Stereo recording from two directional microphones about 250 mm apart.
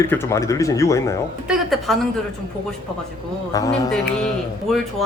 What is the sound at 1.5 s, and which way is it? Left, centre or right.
Speech, centre.